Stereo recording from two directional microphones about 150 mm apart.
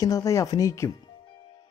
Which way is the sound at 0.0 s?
20° left (ahead or behind).